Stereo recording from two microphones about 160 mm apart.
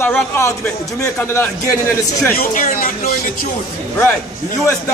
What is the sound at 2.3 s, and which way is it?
Speech, 60° left (ahead or behind).